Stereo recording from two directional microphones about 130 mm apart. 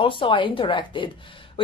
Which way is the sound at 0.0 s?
40° left (ahead or behind).